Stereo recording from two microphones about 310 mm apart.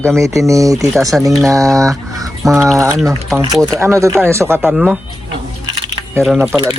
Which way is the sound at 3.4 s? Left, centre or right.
Centre.